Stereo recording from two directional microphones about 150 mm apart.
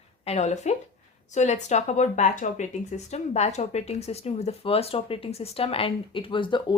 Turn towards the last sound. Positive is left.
turn(degrees=30)  # may be behind; listen again after turning